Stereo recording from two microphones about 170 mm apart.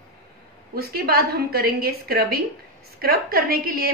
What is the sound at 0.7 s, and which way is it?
A woman's voice, 65° right (ahead or behind).